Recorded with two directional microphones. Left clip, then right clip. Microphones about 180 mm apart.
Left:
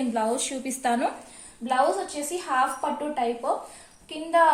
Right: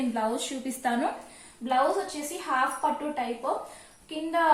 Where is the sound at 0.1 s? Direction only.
40° left (ahead or behind).